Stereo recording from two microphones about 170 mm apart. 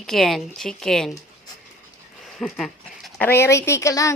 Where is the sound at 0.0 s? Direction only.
Centre (ahead or behind).